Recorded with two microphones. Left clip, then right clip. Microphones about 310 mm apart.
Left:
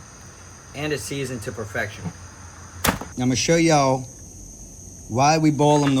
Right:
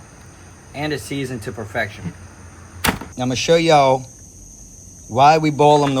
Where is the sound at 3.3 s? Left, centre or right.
Centre.